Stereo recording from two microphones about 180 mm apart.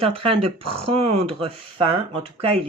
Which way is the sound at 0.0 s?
30° right (ahead or behind).